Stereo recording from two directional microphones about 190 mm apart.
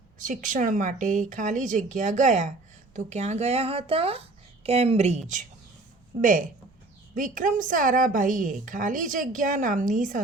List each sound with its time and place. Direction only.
0.2 s speech: 45° right (ahead or behind)
7.2 s a woman's voice: 45° right (ahead or behind)